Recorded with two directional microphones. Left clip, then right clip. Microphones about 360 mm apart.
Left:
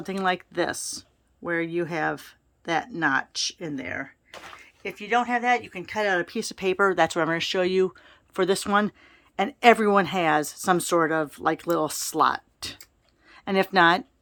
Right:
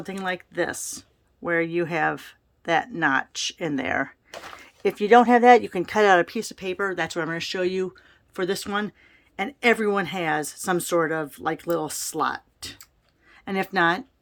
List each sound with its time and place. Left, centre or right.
0.0 s speech: centre